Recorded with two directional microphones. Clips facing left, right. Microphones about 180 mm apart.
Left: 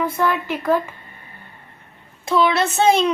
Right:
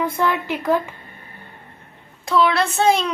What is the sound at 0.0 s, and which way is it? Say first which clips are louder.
Speech: even; 15° right (ahead or behind).